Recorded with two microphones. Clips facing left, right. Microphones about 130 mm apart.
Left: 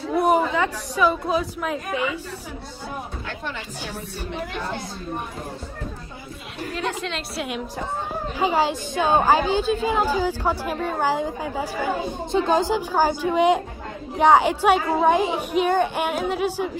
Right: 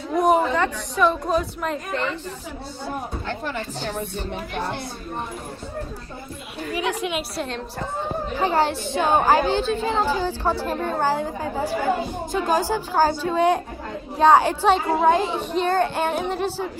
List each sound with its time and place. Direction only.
0.1 s speech: 5° left (ahead or behind)
6.7 s a woman's voice: 10° right (ahead or behind)
7.3 s a woman's voice: 10° left (ahead or behind)
12.3 s a woman's voice: 25° left (ahead or behind)